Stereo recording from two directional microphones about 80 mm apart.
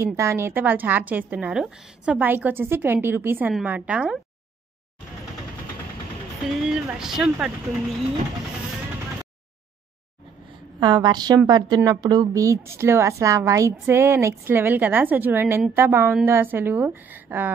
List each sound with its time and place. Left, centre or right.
0.0 s a woman's voice: right
0.5 s a woman's voice: right
2.1 s a woman's voice: right
6.7 s speech: centre
10.8 s a woman's voice: right
12.4 s a woman's voice: right